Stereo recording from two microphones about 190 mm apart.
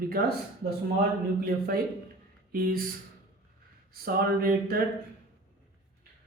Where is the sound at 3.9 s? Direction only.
50° right (ahead or behind).